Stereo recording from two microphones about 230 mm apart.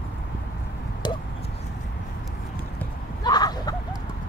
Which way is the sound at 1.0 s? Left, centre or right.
Centre.